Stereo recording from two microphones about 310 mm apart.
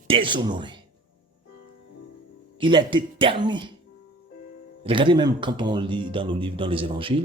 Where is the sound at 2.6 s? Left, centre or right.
Centre.